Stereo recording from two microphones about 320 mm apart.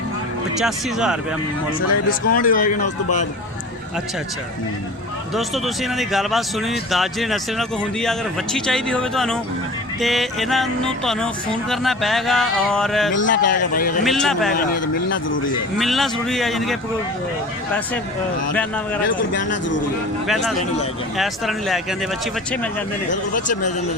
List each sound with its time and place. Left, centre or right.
0.6 s speech: centre
2.0 s speech: left
2.8 s a man's voice: left
5.3 s speech: centre
13.2 s speech: left
14.0 s speech: centre
14.5 s speech: left
15.8 s speech: centre
19.0 s speech: left
20.2 s speech: centre
23.1 s a man's voice: left